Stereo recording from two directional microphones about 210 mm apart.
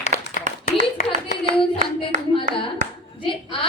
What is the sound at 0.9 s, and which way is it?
Speech, 35° left (ahead or behind).